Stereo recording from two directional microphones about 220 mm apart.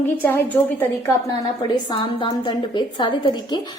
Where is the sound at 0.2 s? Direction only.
10° left (ahead or behind).